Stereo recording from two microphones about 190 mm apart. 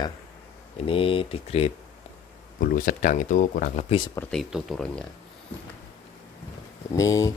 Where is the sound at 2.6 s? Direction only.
45° left (ahead or behind).